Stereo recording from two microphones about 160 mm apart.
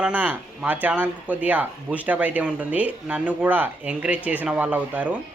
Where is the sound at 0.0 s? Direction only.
10° right (ahead or behind).